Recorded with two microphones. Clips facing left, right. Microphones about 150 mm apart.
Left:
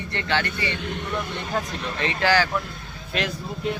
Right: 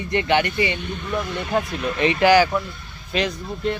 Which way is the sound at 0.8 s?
90° left.